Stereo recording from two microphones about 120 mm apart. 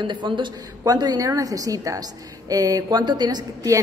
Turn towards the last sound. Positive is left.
turn(degrees=-35)  # may be behind; listen again after turning